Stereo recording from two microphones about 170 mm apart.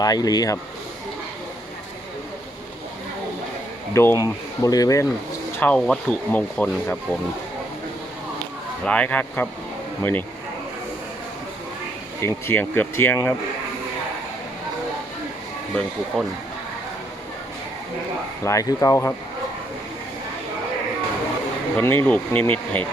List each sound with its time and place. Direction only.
0.0 s speech: 20° left (ahead or behind)
3.9 s speech: 15° left (ahead or behind)
5.5 s speech: 10° left (ahead or behind)
8.8 s speech: 5° left (ahead or behind)
12.2 s speech: 10° left (ahead or behind)
16.1 s speech: centre (ahead or behind)
18.4 s speech: 20° left (ahead or behind)
21.8 s speech: 10° left (ahead or behind)